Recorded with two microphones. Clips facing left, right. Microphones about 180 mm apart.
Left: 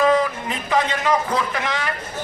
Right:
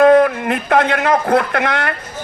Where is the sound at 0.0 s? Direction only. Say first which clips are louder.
Right 8 dB; 60° right (ahead or behind).